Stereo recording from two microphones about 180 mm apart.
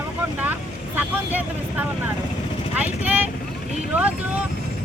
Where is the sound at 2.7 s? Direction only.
10° right (ahead or behind).